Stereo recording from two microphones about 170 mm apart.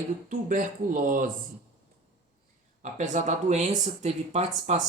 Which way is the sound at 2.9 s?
45° right (ahead or behind).